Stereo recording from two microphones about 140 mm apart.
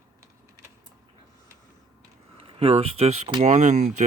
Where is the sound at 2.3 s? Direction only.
45° right (ahead or behind).